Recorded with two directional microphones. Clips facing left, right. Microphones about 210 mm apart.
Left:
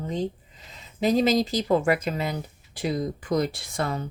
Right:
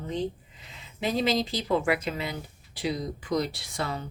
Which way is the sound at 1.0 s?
40° left (ahead or behind).